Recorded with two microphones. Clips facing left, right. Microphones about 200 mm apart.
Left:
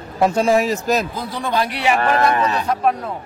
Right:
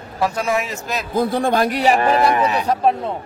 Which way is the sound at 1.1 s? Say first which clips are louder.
Right 6 dB; 55° right (ahead or behind).